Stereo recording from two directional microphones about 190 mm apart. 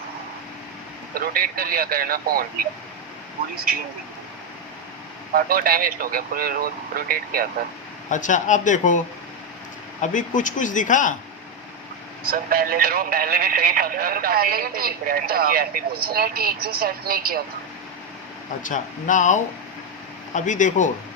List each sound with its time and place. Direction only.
1.1 s speech: 50° right (ahead or behind)
5.3 s speech: 50° right (ahead or behind)
8.1 s speech: 40° left (ahead or behind)
10.0 s speech: 40° left (ahead or behind)
12.2 s speech: 50° right (ahead or behind)
18.6 s speech: 40° left (ahead or behind)